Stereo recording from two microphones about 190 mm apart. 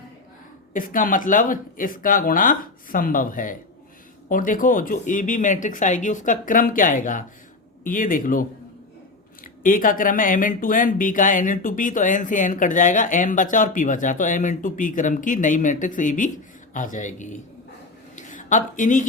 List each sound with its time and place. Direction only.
0.7 s speech: 45° left (ahead or behind)